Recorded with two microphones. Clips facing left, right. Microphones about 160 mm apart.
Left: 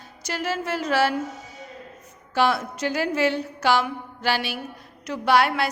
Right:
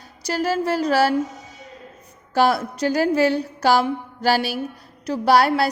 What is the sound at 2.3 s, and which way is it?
A woman's voice, 40° right (ahead or behind).